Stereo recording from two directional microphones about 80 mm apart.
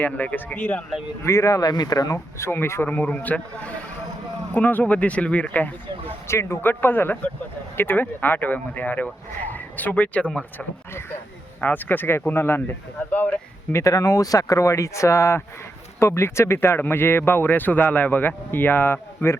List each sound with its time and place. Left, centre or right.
0.0 s speech: left
1.2 s speech: left
2.1 s speech: left
2.9 s speech: centre
4.5 s speech: centre
6.2 s speech: left
13.7 s speech: left